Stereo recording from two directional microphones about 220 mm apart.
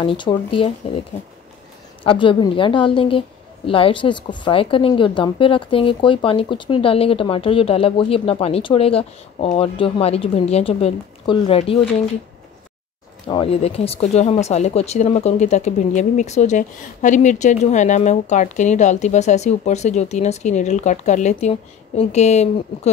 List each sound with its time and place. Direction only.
0.0 s a woman's voice: 20° left (ahead or behind)
2.0 s a woman's voice: 20° left (ahead or behind)
13.3 s speech: 25° left (ahead or behind)